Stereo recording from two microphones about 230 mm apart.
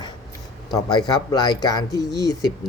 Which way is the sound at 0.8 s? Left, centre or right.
Centre.